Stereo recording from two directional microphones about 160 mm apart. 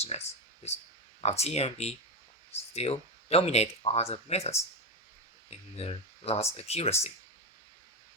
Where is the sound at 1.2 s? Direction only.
40° left (ahead or behind).